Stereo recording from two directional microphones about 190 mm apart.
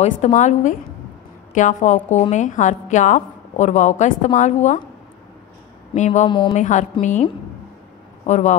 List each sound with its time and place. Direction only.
0.0 s a woman's voice: 40° left (ahead or behind)
5.9 s a woman's voice: 40° left (ahead or behind)
6.2 s speech: 25° left (ahead or behind)
6.5 s a woman's voice: 40° left (ahead or behind)
8.3 s a woman's voice: 40° left (ahead or behind)